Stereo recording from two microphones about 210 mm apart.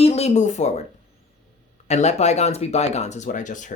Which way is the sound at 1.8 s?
30° left (ahead or behind).